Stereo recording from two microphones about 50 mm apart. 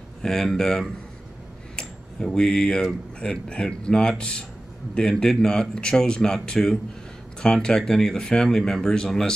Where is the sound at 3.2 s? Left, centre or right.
Centre.